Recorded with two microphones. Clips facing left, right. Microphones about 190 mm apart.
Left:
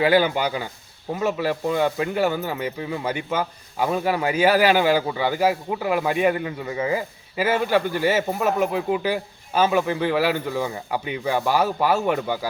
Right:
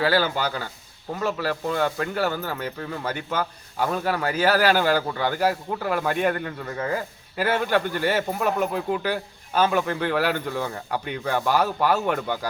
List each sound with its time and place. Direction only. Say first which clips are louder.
0.0 s speech: left 4 dB; 15° left (ahead or behind)